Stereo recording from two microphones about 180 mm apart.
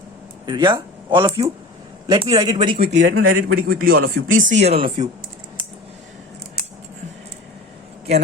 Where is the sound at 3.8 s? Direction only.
60° right (ahead or behind); by 4.6 s 90° right.